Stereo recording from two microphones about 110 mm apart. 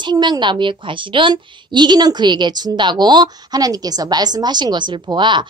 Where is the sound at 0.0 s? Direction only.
40° right (ahead or behind).